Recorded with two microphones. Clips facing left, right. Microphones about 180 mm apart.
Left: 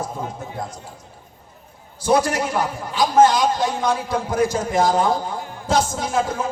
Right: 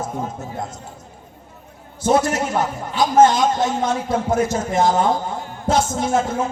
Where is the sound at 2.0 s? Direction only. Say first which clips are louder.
Right 1 dB; 25° right (ahead or behind).